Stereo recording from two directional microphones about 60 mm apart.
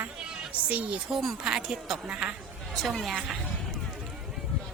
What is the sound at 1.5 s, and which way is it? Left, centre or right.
Speech, centre.